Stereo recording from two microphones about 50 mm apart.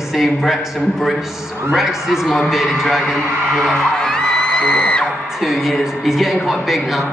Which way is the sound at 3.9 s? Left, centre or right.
Centre.